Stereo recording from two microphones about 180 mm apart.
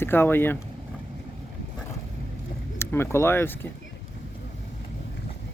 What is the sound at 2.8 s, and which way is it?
Speech, 15° left (ahead or behind).